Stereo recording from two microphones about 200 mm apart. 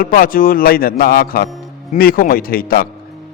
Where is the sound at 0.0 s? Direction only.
45° left (ahead or behind).